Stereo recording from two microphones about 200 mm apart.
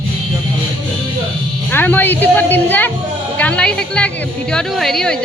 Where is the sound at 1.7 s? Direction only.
10° left (ahead or behind).